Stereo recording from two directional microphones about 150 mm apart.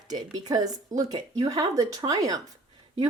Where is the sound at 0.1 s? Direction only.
25° right (ahead or behind).